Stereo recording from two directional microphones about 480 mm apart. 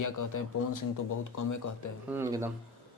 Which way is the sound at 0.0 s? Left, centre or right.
Left.